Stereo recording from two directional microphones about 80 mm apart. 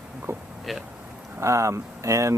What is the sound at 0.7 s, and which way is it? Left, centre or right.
Speech, centre.